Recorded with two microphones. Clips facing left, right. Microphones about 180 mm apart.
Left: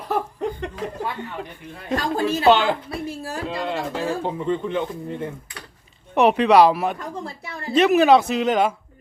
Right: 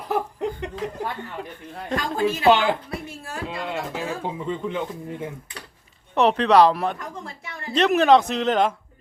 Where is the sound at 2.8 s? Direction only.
35° left (ahead or behind).